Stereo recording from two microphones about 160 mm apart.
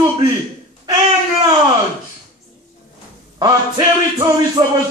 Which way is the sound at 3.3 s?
25° right (ahead or behind).